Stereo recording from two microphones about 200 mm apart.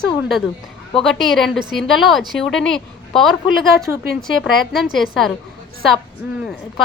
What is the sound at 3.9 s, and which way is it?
Speech, 10° right (ahead or behind).